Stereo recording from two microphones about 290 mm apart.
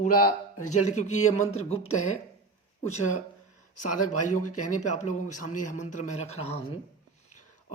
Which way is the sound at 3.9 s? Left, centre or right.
Left.